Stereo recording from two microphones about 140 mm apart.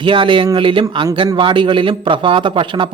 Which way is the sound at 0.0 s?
35° right (ahead or behind).